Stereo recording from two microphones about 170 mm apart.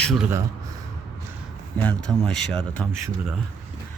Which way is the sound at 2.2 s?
5° left (ahead or behind).